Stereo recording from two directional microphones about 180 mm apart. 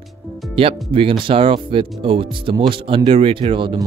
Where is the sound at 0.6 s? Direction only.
30° right (ahead or behind).